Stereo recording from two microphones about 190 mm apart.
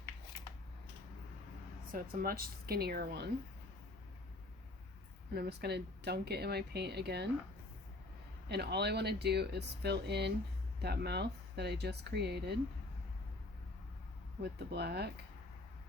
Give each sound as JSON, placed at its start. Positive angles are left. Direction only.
{"t": 1.9, "sound": "speech", "side_deg": -50}
{"t": 5.3, "sound": "speech", "side_deg": -60}
{"t": 8.4, "sound": "speech", "side_deg": -60}
{"t": 14.4, "sound": "speech", "side_deg": -60}